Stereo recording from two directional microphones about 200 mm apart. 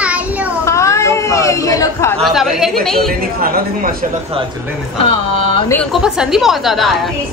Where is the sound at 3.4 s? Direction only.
50° right (ahead or behind).